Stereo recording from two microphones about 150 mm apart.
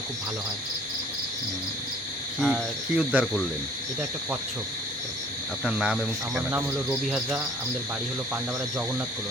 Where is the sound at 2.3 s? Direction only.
Centre (ahead or behind).